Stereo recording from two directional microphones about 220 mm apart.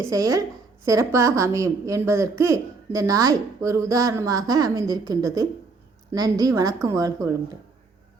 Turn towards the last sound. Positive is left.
turn(degrees=-15)  # may be behind; listen again after turning